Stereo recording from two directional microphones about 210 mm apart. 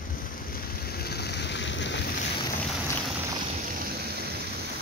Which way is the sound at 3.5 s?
40° right (ahead or behind).